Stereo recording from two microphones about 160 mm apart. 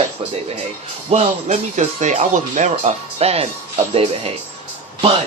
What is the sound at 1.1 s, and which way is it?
Speech, 45° right (ahead or behind).